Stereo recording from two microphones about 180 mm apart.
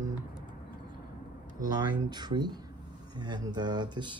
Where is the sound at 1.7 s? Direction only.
25° right (ahead or behind).